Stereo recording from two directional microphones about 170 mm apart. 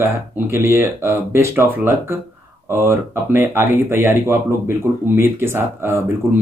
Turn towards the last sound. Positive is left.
turn(degrees=-15)  # may be behind; listen again after turning